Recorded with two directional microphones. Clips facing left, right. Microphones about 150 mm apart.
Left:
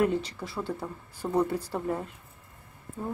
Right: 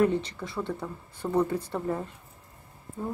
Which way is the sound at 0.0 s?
5° left (ahead or behind).